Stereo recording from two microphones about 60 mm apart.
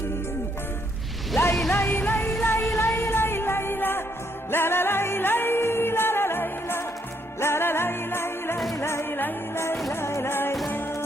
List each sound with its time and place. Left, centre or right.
1.7 s music: left